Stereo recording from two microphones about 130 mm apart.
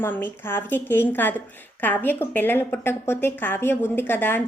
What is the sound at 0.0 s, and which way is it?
A woman's voice, 15° left (ahead or behind).